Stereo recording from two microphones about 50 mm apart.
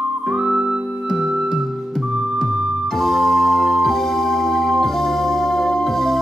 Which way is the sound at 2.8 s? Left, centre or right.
Centre.